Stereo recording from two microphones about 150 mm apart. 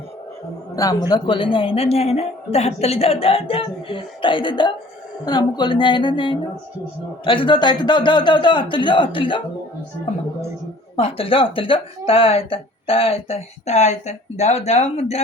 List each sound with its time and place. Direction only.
0.8 s speech: 25° left (ahead or behind)
10.9 s speech: 40° left (ahead or behind)